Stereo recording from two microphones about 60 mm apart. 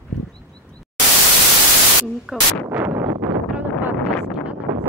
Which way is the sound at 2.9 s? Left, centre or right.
Right.